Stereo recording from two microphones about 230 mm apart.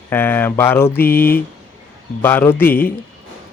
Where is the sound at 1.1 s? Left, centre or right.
Left.